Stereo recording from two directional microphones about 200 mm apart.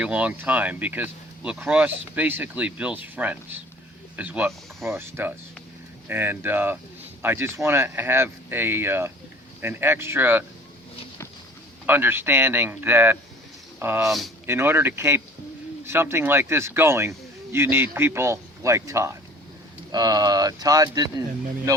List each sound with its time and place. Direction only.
0.0 s speech: 5° right (ahead or behind)
11.9 s speech: 10° right (ahead or behind)